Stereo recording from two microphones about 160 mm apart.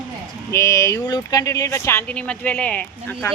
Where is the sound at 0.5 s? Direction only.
20° left (ahead or behind).